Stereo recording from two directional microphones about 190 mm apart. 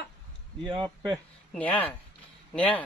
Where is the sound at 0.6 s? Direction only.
25° right (ahead or behind).